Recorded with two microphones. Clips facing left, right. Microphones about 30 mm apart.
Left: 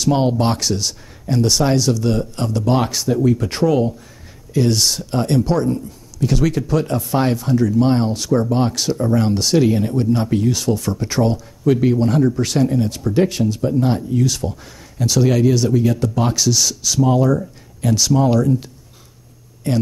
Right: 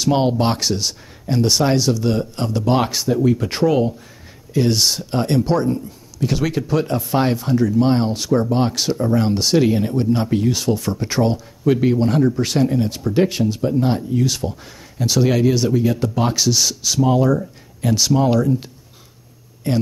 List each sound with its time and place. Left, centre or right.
0.0 s speech: centre